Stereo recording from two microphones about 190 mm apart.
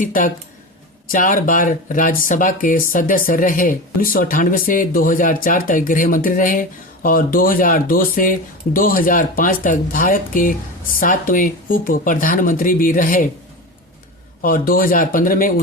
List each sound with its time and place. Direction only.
0.0 s speech: 45° left (ahead or behind)
14.4 s speech: 50° left (ahead or behind)